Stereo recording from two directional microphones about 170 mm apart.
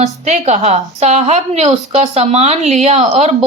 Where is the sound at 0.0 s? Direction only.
40° right (ahead or behind).